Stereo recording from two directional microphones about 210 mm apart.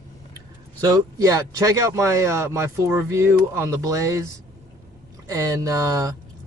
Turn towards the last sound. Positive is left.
turn(degrees=-15)  # may be behind; listen again after turning